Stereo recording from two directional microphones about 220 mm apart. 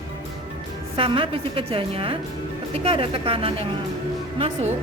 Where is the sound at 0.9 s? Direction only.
25° right (ahead or behind).